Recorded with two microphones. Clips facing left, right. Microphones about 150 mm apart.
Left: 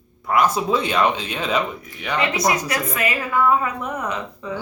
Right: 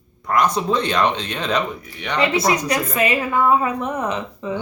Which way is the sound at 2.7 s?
25° right (ahead or behind).